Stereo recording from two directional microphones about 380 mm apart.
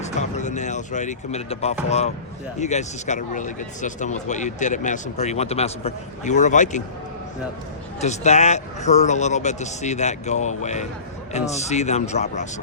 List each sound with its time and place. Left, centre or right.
0.0 s speech: centre
8.0 s a man's voice: centre